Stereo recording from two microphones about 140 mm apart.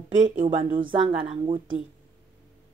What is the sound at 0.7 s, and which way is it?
Speech, 35° right (ahead or behind).